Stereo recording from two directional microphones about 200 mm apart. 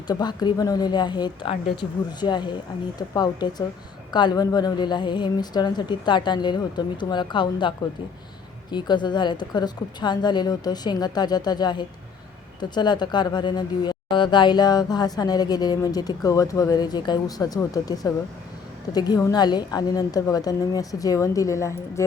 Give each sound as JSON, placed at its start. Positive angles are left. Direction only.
{"t": 0.1, "sound": "a woman's voice", "side_deg": 20}
{"t": 8.7, "sound": "a woman's voice", "side_deg": 20}